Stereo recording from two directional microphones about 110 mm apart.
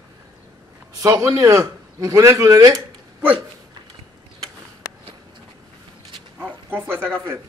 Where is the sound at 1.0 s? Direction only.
30° right (ahead or behind).